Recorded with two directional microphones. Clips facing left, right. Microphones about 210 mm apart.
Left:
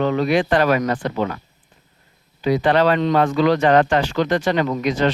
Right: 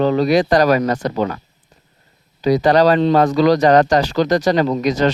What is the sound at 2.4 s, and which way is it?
Speech, 40° right (ahead or behind).